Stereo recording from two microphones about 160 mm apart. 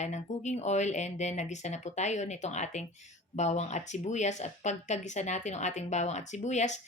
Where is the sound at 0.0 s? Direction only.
45° left (ahead or behind).